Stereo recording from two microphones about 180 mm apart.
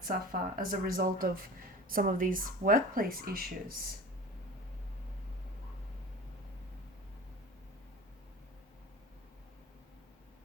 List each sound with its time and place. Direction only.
0.0 s speech: 50° right (ahead or behind)